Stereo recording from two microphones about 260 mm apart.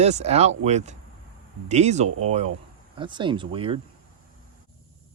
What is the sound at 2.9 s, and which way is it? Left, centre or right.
Speech, centre.